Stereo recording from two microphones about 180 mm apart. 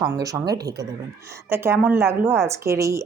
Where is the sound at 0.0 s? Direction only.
15° right (ahead or behind).